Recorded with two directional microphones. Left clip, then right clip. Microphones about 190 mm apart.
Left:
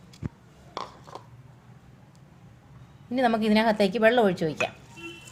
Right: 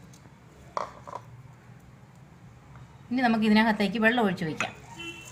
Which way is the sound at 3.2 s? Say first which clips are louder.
Left 1 dB; 30° left (ahead or behind).